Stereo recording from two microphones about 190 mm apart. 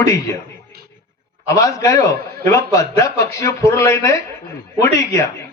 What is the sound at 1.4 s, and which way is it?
A man's voice, 15° left (ahead or behind).